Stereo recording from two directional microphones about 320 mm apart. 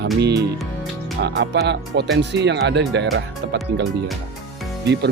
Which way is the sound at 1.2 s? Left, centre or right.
Right.